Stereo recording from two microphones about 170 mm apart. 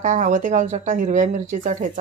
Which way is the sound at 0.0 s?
50° right (ahead or behind).